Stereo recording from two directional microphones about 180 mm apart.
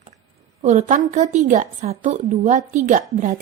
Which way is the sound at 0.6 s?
40° right (ahead or behind).